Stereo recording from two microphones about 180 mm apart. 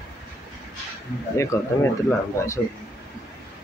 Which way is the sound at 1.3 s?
15° left (ahead or behind).